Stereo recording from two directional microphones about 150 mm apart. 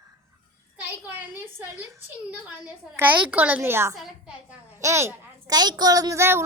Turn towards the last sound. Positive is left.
turn(degrees=-20)  # may be behind; listen again after turning